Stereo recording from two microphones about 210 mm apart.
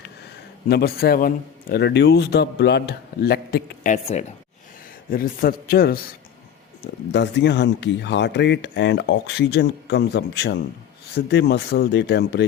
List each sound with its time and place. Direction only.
0.7 s a man's voice: 50° left (ahead or behind)
3.9 s speech: 30° left (ahead or behind)
5.1 s a man's voice: 45° left (ahead or behind)